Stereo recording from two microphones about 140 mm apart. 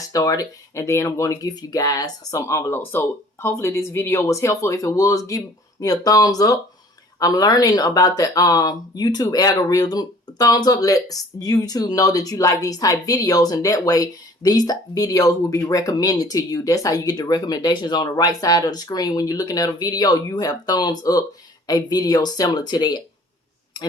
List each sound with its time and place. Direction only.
0.1 s speech: 25° left (ahead or behind)